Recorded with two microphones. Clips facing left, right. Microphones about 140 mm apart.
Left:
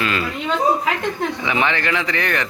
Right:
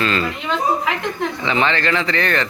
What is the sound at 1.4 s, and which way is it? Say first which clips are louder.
A man's voice: right 4 dB; 15° left (ahead or behind).